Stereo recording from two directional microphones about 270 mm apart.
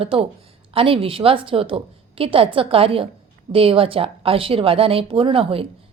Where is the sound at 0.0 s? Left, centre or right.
Right.